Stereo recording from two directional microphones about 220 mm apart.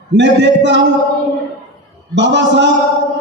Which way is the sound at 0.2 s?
55° right (ahead or behind).